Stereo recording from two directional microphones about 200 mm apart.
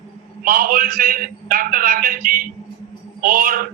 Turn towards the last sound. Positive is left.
turn(degrees=-45)  # may be behind; listen again after turning